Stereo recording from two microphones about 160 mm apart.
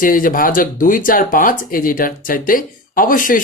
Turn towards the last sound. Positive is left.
turn(degrees=60)  # may be behind; listen again after turning